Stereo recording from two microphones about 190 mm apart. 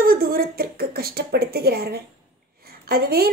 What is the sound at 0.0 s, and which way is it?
A woman's voice, 50° right (ahead or behind).